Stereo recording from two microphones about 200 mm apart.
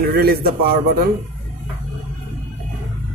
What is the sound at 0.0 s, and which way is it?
A man's voice, 50° right (ahead or behind).